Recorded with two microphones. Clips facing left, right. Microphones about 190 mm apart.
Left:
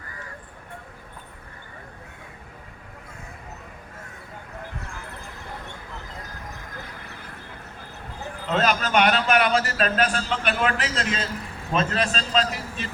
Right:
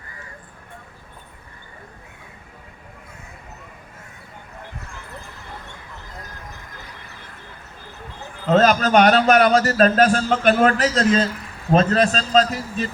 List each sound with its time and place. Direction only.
8.4 s a man's voice: 40° right (ahead or behind)